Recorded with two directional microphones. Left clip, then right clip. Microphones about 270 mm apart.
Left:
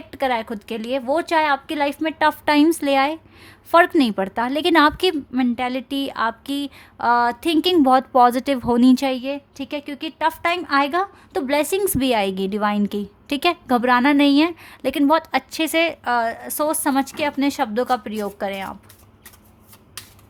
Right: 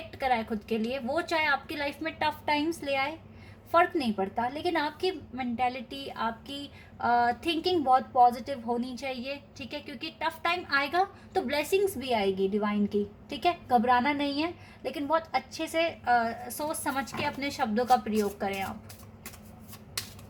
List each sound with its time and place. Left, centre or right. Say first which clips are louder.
0.1 s a woman's voice: left 7 dB; left